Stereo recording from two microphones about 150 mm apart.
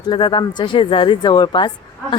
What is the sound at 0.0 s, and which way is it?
Speech, 30° left (ahead or behind).